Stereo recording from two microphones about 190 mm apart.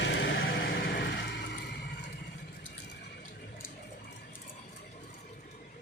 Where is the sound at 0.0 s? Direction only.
65° left (ahead or behind).